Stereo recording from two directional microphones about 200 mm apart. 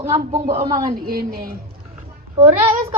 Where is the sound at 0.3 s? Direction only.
30° right (ahead or behind).